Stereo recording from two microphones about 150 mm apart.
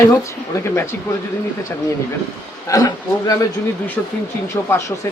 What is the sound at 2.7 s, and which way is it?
Speech, 25° left (ahead or behind).